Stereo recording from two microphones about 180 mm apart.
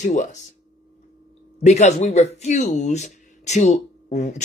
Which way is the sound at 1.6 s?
40° left (ahead or behind).